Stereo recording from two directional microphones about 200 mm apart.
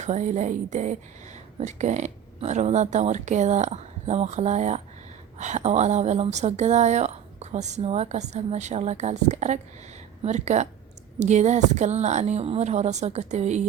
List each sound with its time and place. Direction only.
0.0 s a woman's voice: 35° right (ahead or behind)